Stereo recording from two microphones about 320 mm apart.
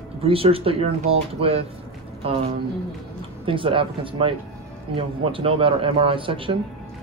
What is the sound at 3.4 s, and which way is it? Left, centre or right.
Speech, centre.